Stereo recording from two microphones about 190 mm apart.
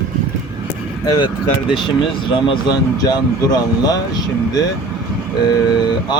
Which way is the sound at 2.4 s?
25° left (ahead or behind).